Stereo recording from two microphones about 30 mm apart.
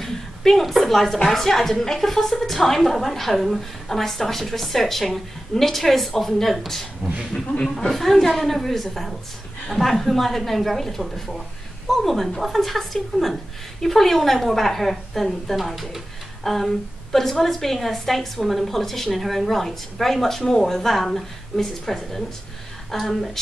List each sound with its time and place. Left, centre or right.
0.0 s a woman's voice: centre
3.9 s a woman's voice: centre
7.0 s speech: centre
7.7 s a woman's voice: centre
16.4 s a woman's voice: centre